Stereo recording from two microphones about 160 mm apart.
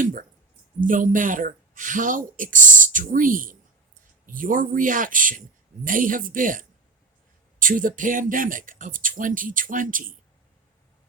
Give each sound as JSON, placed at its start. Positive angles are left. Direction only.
{"t": 0.0, "sound": "speech", "side_deg": -60}